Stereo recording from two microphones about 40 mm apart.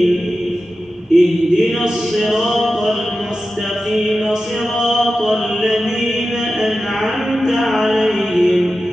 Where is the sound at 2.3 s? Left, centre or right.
Centre.